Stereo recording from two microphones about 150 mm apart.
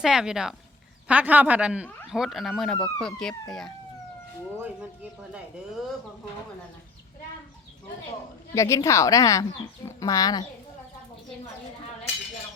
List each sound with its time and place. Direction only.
0.0 s speech: 5° right (ahead or behind)
8.5 s speech: 20° left (ahead or behind)